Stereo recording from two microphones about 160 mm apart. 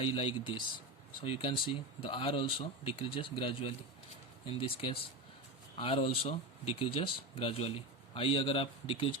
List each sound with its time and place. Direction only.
0.0 s speech: 35° left (ahead or behind)